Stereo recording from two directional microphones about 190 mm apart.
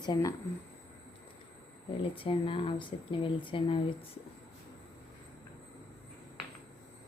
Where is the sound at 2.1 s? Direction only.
30° left (ahead or behind).